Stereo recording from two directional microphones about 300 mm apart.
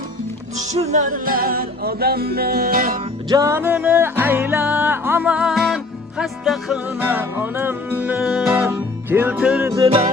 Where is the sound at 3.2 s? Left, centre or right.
Centre.